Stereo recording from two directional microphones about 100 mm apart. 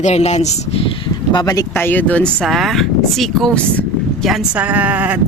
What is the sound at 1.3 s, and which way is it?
Speech, 40° left (ahead or behind).